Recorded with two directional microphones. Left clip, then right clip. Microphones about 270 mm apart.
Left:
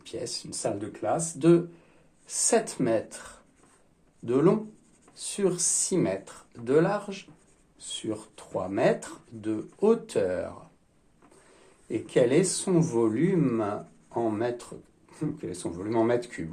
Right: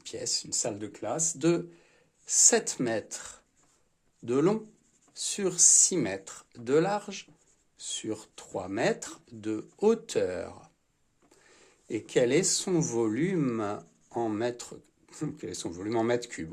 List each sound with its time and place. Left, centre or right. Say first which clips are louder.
0.0 s a man's voice: right 1 dB; right
11.9 s a man's voice: left 2 dB; right